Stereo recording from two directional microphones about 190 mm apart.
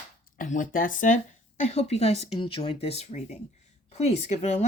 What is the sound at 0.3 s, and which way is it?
Speech, 45° left (ahead or behind).